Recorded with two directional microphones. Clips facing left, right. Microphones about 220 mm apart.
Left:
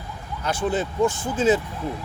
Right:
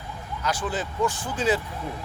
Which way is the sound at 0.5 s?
25° left (ahead or behind).